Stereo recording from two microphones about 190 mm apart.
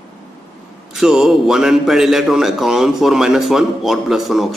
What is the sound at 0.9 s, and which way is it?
A man's voice, 5° right (ahead or behind).